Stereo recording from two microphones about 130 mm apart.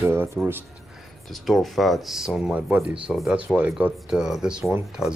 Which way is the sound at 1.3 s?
Centre (ahead or behind).